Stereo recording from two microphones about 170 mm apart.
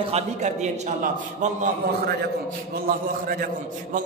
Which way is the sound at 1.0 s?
50° right (ahead or behind).